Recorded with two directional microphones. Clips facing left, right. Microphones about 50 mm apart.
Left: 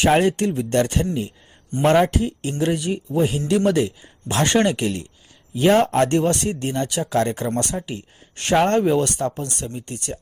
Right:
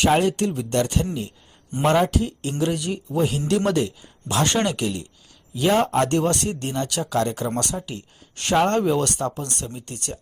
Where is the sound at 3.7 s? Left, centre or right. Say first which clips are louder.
Left 2 dB; centre.